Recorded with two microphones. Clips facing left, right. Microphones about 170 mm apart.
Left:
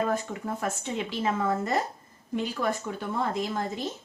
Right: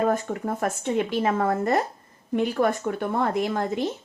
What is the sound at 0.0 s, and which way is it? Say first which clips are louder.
Speech: right 5 dB; 50° right (ahead or behind).